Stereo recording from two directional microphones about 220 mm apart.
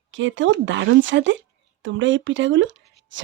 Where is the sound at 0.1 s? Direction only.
55° right (ahead or behind).